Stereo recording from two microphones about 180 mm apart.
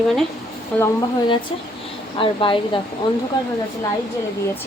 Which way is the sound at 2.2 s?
30° left (ahead or behind).